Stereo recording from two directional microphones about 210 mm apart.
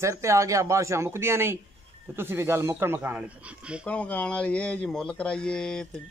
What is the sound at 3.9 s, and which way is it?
Speech, 5° left (ahead or behind).